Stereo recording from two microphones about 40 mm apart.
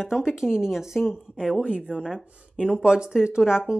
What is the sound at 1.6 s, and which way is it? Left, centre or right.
Speech, right.